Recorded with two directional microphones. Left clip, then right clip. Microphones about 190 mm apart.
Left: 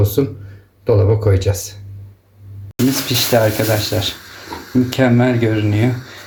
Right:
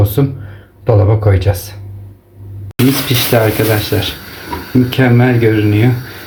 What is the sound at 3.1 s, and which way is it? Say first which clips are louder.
Speech: even; 10° left (ahead or behind).